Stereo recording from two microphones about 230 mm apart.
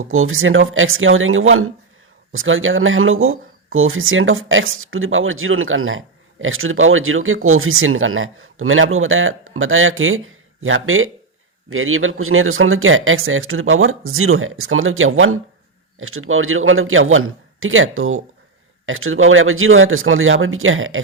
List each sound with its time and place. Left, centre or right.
0.0 s speech: right